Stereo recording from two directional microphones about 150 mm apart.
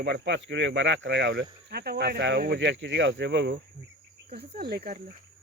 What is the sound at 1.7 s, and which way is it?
Speech, 90° right.